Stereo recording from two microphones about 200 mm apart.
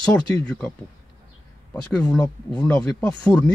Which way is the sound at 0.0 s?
10° left (ahead or behind).